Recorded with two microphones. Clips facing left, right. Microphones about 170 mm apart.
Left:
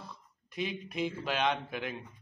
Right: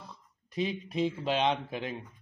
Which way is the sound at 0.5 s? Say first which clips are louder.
Right 4 dB; 30° right (ahead or behind).